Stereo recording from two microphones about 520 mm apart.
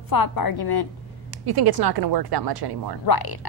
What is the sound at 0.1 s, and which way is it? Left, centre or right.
Speech, left.